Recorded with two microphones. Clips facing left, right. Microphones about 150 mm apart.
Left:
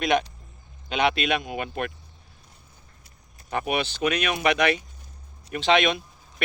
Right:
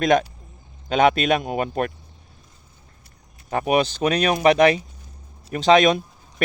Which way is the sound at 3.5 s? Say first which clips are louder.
Right 7 dB; 40° right (ahead or behind).